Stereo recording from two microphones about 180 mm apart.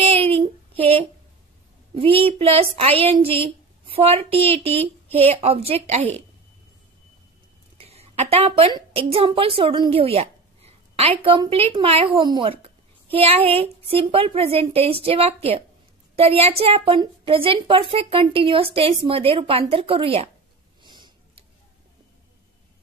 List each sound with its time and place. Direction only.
0.0 s child singing: 30° right (ahead or behind)
2.0 s a woman's voice: 30° right (ahead or behind)
7.7 s a woman's voice: 35° right (ahead or behind)
20.8 s tick-tock: 25° right (ahead or behind)